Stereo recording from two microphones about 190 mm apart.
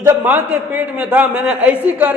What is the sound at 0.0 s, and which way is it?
A man's voice, 10° right (ahead or behind).